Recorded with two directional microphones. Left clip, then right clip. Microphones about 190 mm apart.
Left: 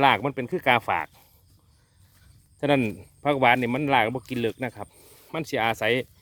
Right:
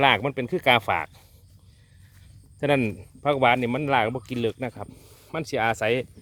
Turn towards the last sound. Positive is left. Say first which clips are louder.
# even
turn(degrees=15)  # may be behind; listen again after turning